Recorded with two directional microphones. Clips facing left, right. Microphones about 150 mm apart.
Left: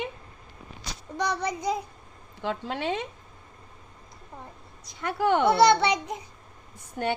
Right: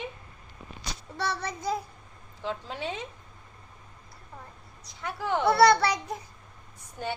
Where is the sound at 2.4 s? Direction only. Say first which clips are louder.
Left 4 dB; 65° left (ahead or behind).